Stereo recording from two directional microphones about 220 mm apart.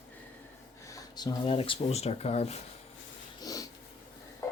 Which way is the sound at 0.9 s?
15° left (ahead or behind).